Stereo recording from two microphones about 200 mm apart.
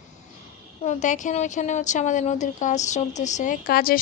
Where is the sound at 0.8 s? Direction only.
35° left (ahead or behind).